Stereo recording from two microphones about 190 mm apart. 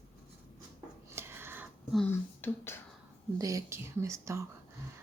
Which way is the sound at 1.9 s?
10° left (ahead or behind).